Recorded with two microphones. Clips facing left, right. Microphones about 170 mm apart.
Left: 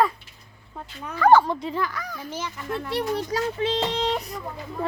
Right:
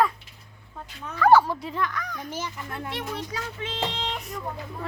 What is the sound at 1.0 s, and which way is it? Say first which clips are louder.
Speech: left 1 dB; 5° left (ahead or behind).